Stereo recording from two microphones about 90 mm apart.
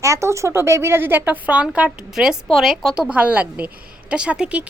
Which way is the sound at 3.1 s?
15° right (ahead or behind).